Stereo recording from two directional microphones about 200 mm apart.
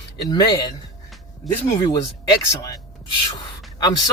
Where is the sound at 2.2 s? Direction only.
15° left (ahead or behind).